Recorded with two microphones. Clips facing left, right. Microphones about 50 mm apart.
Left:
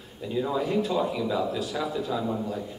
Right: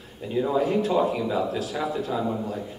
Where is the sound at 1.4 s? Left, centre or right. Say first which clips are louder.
Right 2 dB; centre.